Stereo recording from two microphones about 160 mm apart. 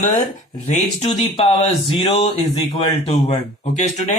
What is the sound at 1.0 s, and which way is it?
Speech, 35° left (ahead or behind).